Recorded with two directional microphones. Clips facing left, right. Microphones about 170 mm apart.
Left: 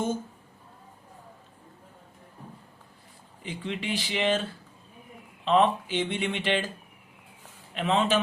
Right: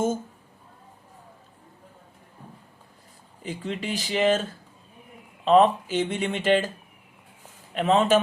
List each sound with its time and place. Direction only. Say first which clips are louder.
3.4 s speech: right 2 dB; 45° right (ahead or behind)
5.5 s speech: right 5 dB; 45° right (ahead or behind)
7.7 s speech: right 5 dB; 45° right (ahead or behind)